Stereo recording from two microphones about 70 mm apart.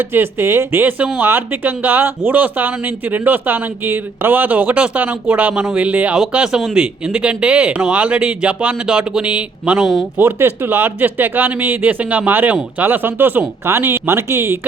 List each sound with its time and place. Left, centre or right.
0.1 s speech: right; by 9.7 s centre
9.7 s speech: centre
10.2 s speech: right